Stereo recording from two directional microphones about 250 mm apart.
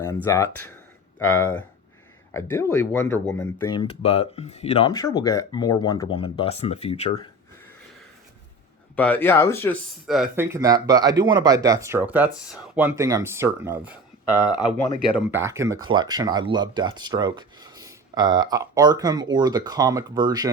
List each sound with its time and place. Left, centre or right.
0.3 s speech: centre
3.8 s speech: left
4.9 s speech: centre
9.0 s speech: centre
15.1 s speech: centre